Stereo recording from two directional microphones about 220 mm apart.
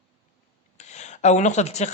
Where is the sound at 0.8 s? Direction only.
30° left (ahead or behind).